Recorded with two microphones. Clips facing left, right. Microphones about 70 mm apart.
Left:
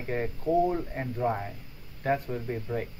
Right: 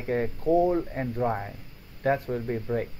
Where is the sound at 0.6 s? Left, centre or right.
Centre.